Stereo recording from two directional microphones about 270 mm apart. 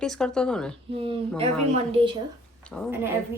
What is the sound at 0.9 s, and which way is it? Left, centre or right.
Speech, right.